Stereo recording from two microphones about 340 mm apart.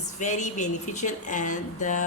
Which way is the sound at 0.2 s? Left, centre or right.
Left.